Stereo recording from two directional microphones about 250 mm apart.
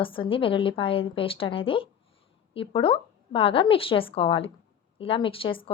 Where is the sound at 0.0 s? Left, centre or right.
Left.